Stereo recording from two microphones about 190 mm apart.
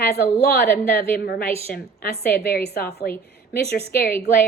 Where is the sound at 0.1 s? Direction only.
55° left (ahead or behind).